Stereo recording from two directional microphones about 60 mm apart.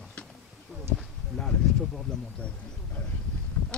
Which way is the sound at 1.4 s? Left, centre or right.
Centre.